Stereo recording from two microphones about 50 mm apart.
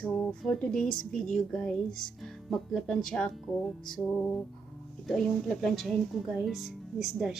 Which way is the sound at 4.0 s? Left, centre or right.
Left.